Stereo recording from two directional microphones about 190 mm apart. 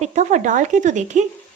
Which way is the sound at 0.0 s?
35° right (ahead or behind).